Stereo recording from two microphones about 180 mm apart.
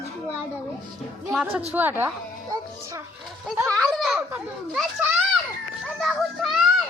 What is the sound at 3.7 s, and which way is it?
Speech, centre (ahead or behind).